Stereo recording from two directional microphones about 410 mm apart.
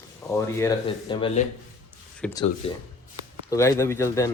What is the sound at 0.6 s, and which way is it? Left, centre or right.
Speech, centre.